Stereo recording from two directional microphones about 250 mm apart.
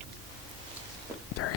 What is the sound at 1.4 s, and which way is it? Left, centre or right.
Whispering, left.